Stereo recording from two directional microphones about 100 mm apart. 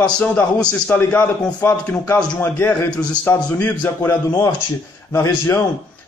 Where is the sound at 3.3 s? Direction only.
20° left (ahead or behind).